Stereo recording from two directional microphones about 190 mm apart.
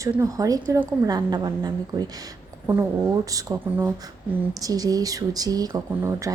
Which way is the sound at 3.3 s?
15° right (ahead or behind).